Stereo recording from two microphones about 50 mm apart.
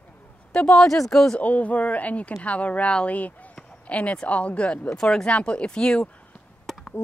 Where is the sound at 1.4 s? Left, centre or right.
Left.